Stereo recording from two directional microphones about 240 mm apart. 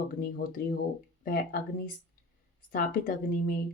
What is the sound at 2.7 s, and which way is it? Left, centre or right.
Speech, left.